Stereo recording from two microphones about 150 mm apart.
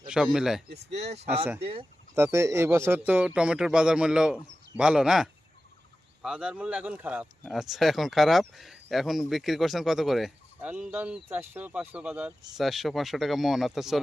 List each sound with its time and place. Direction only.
0.1 s speech: 5° right (ahead or behind)
0.9 s speech: 45° right (ahead or behind)
2.1 s speech: 20° right (ahead or behind); by 14.0 s centre (ahead or behind)